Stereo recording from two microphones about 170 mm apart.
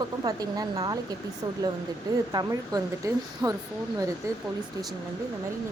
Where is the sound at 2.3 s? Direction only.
20° right (ahead or behind).